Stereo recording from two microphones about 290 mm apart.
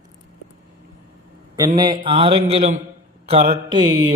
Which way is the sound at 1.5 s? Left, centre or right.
Centre.